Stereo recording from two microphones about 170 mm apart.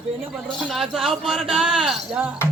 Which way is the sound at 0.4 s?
Centre (ahead or behind).